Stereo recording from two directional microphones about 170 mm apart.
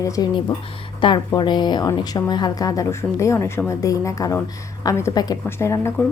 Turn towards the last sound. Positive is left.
turn(degrees=15)  # may be behind; listen again after turning